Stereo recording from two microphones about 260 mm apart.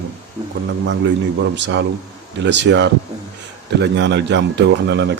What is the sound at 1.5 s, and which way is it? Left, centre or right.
A man's voice, right.